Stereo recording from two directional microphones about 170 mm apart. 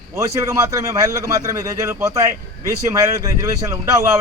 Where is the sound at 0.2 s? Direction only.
20° right (ahead or behind).